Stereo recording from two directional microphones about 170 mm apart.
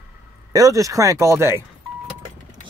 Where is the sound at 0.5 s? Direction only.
20° right (ahead or behind).